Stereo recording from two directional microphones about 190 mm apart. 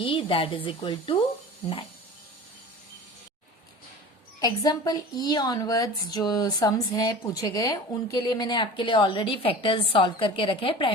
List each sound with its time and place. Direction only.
0.0 s a woman's voice: 25° left (ahead or behind)
4.4 s a woman's voice: 20° left (ahead or behind)